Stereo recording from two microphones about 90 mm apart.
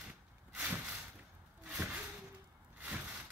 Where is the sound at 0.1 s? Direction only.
15° right (ahead or behind).